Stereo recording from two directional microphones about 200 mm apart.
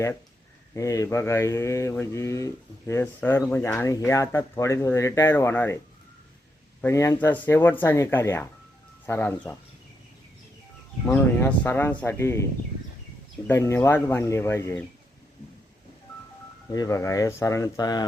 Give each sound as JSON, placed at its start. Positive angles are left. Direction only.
{"t": 0.7, "sound": "speech", "side_deg": 15}
{"t": 6.8, "sound": "speech", "side_deg": 15}
{"t": 11.0, "sound": "speech", "side_deg": 10}
{"t": 13.5, "sound": "speech", "side_deg": 15}
{"t": 16.7, "sound": "speech", "side_deg": 15}